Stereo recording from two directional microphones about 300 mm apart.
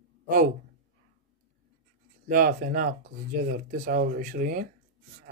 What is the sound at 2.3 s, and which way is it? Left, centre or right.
Speech, right.